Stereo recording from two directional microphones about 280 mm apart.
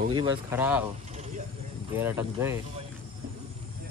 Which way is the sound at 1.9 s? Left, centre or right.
Centre.